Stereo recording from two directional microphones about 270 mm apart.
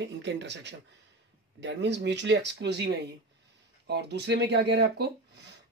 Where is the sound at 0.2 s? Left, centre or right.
Right.